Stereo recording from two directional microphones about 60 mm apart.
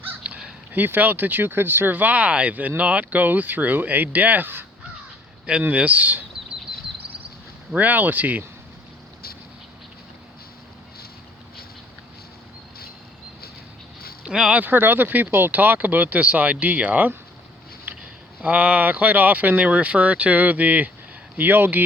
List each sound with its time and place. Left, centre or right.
0.2 s crow: centre
0.7 s speech: right
5.6 s speech: right
7.8 s speech: right
14.3 s speech: centre
14.5 s speech: right